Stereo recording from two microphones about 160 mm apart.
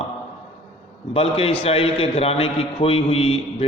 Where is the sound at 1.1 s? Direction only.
40° left (ahead or behind).